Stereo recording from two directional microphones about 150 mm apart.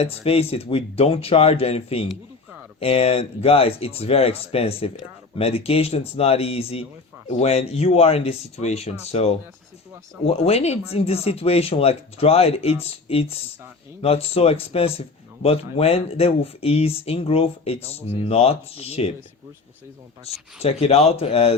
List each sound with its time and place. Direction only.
0.0 s speech: 40° left (ahead or behind)
20.2 s speech: 45° left (ahead or behind)